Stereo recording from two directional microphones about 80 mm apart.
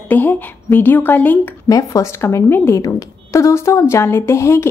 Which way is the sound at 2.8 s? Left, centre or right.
Left.